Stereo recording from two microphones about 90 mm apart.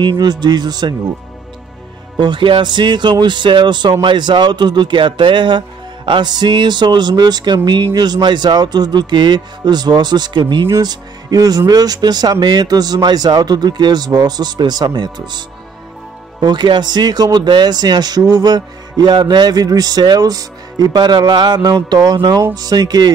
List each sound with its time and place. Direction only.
0.0 s speech: 50° right (ahead or behind)
2.1 s speech: 60° right (ahead or behind)